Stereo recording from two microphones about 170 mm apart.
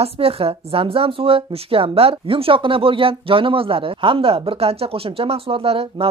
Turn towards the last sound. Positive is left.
turn(degrees=-35)  # may be behind; listen again after turning